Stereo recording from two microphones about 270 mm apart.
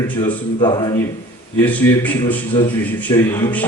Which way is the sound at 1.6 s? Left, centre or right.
Centre.